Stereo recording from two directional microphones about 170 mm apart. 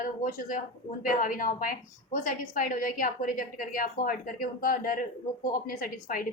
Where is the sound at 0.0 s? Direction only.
50° left (ahead or behind).